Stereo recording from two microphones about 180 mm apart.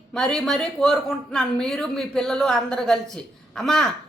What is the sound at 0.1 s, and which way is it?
Speech, 5° left (ahead or behind).